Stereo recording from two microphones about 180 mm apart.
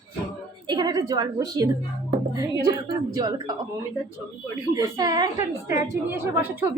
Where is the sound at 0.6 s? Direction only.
25° right (ahead or behind).